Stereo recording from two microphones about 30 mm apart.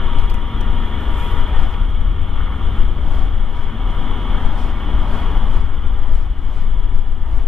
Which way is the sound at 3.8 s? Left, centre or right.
Centre.